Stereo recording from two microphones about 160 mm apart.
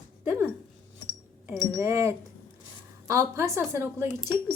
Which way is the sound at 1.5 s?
20° right (ahead or behind).